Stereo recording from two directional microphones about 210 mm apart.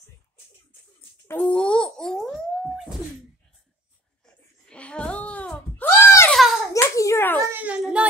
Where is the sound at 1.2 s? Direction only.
5° left (ahead or behind).